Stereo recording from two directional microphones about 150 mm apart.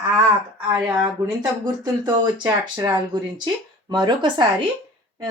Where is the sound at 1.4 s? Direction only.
25° right (ahead or behind).